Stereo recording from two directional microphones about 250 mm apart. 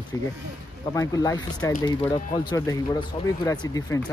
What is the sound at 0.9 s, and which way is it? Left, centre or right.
Speech, centre.